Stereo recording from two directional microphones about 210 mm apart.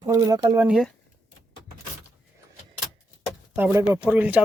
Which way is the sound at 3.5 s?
10° right (ahead or behind).